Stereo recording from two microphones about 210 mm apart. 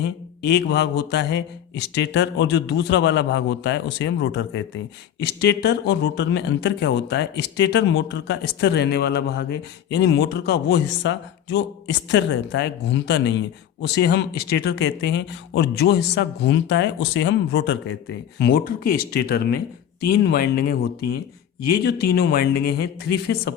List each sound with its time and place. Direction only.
0.0 s speech: 55° left (ahead or behind)